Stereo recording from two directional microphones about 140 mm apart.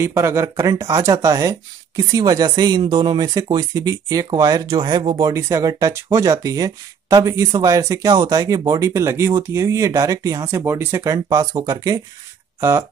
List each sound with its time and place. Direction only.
0.0 s speech: 20° right (ahead or behind)